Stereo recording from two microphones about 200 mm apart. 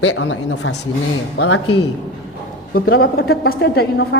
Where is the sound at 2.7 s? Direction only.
50° left (ahead or behind).